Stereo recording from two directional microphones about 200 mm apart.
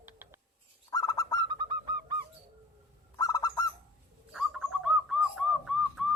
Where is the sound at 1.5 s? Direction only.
20° right (ahead or behind).